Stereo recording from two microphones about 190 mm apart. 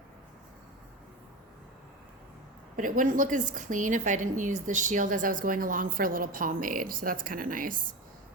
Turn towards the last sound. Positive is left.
turn(degrees=-45)  # may be behind; listen again after turning